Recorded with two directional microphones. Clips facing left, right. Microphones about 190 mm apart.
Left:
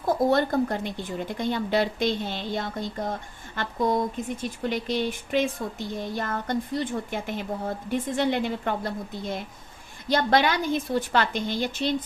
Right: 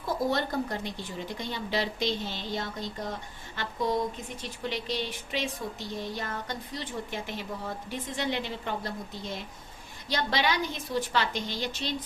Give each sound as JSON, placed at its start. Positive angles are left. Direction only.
{"t": 0.3, "sound": "speech", "side_deg": 55}